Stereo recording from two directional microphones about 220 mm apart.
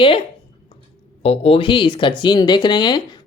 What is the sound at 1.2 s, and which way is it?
Speech, 25° left (ahead or behind).